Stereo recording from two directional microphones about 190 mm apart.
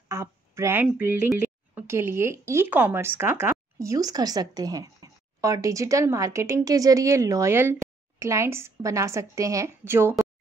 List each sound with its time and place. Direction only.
0.1 s speech: 15° right (ahead or behind)